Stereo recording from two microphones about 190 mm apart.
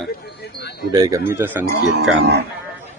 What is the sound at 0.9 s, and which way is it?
Speech, 20° right (ahead or behind).